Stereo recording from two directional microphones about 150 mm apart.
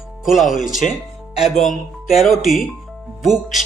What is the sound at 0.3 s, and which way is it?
Speech, centre (ahead or behind).